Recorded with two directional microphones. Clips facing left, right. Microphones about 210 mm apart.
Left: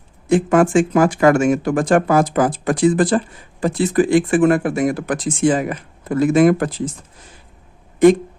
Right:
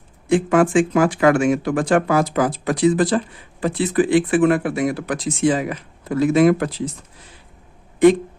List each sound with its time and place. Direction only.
0.3 s speech: 45° left (ahead or behind)